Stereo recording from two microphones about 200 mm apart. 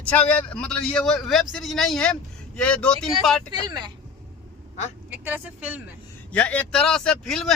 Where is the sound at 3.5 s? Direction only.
20° right (ahead or behind).